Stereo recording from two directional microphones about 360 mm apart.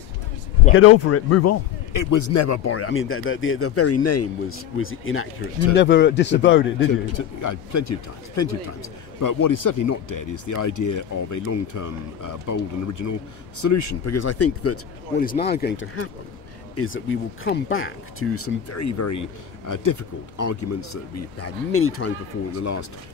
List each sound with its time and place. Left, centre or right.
0.7 s speech: left
2.0 s speech: left
7.2 s speech: left
9.2 s speech: left
15.1 s speech: left